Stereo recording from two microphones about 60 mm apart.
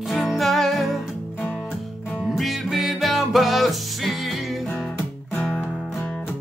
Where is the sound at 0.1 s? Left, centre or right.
Centre.